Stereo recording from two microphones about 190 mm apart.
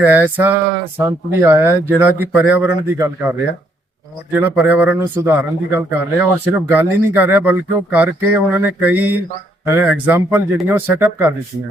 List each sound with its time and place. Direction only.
0.0 s a man's voice: 10° right (ahead or behind)